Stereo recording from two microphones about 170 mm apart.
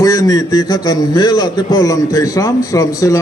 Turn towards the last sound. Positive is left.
turn(degrees=20)  # may be behind; listen again after turning